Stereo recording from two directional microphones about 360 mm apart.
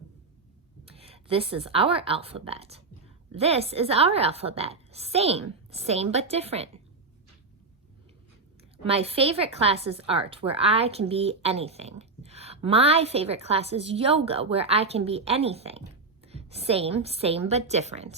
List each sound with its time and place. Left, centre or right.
0.9 s a woman's voice: centre
8.8 s a woman's voice: centre